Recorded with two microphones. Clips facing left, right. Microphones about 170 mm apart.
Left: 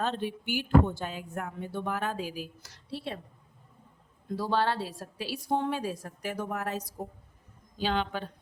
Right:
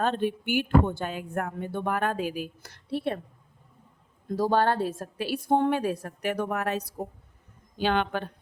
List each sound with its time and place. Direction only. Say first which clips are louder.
0.0 s speech: right 5 dB; 55° right (ahead or behind)
4.3 s speech: right 5 dB; 45° right (ahead or behind)